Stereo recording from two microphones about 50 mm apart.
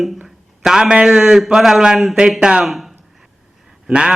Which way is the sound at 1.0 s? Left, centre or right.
Centre.